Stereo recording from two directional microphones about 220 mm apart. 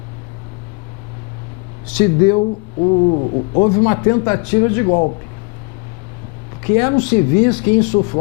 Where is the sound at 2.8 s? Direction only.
30° left (ahead or behind).